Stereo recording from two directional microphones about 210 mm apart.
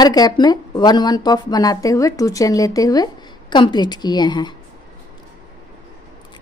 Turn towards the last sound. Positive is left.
turn(degrees=20)  # may be behind; listen again after turning